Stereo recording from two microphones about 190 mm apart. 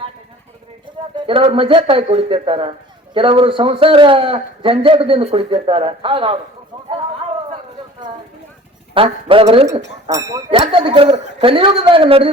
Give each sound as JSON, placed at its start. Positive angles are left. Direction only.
{"t": 1.1, "sound": "a man's voice", "side_deg": -30}
{"t": 9.0, "sound": "a man's voice", "side_deg": -30}
{"t": 9.7, "sound": "a man's voice", "side_deg": -20}